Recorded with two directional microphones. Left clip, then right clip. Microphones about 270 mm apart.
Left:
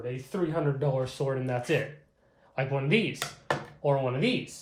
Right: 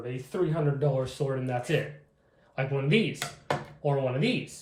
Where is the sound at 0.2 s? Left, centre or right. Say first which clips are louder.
Right 2 dB; left.